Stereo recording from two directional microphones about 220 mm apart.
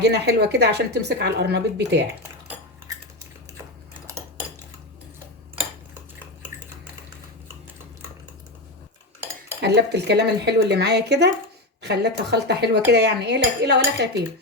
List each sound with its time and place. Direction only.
0.0 s a woman's voice: 50° right (ahead or behind)
4.1 s cutlery: 15° right (ahead or behind)
9.6 s a woman's voice: 50° right (ahead or behind)